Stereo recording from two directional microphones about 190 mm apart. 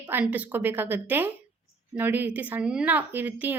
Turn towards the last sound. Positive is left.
turn(degrees=-10)  # may be behind; listen again after turning